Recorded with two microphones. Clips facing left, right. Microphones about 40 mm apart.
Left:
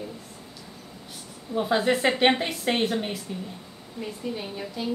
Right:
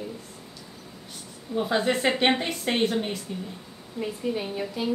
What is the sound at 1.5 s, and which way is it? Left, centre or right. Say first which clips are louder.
Speech: left 1 dB; centre.